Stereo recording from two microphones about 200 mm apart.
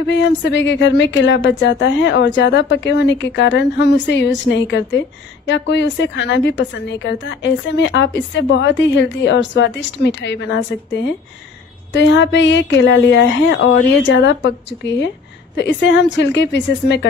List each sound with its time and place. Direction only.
0.0 s a woman's voice: 65° left (ahead or behind)